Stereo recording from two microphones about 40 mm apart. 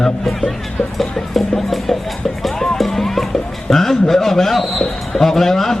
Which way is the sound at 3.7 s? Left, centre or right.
Centre.